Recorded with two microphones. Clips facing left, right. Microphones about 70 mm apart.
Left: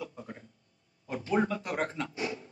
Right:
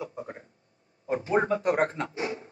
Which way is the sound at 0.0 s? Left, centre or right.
Right.